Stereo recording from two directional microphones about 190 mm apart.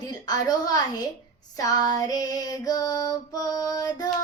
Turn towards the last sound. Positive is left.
turn(degrees=20)  # may be behind; listen again after turning